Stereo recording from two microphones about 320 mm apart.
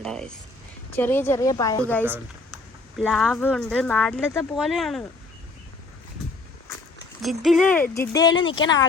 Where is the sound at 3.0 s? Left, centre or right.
Centre.